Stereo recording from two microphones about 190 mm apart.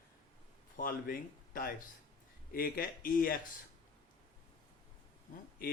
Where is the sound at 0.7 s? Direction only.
50° left (ahead or behind).